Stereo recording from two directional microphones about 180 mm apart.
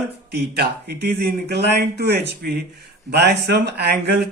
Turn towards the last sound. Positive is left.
turn(degrees=-65)  # may be behind; listen again after turning